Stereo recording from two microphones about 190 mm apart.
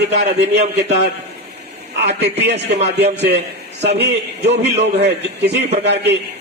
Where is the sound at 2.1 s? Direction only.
65° right (ahead or behind).